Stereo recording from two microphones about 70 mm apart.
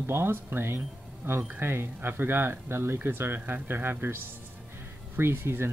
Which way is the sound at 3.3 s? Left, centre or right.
Centre.